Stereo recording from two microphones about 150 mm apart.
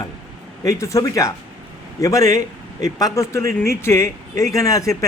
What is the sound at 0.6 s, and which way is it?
Speech, 20° left (ahead or behind).